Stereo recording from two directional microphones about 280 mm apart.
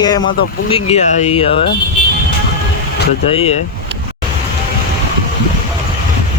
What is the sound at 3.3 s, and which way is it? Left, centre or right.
Speech, left.